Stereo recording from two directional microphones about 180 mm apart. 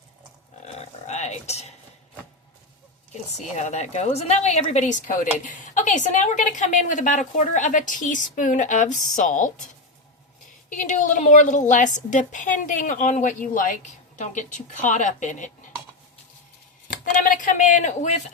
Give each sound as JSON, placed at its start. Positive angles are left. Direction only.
{"t": 0.6, "sound": "a sound", "side_deg": 40}
{"t": 3.5, "sound": "speech", "side_deg": 40}
{"t": 10.7, "sound": "speech", "side_deg": 45}
{"t": 17.2, "sound": "speech", "side_deg": 45}